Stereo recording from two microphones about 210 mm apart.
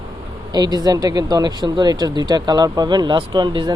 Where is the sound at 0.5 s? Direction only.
20° right (ahead or behind).